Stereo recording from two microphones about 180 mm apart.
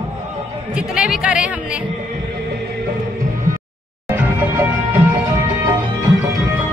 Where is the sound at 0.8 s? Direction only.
5° right (ahead or behind).